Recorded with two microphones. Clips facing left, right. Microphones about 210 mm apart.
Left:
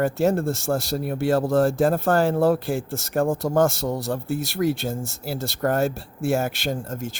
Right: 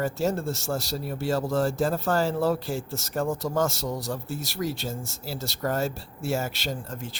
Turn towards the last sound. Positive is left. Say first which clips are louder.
# left 6 dB
turn(degrees=45)  # may be behind; listen again after turning